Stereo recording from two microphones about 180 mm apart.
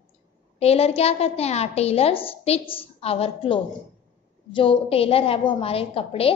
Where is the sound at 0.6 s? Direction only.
35° left (ahead or behind).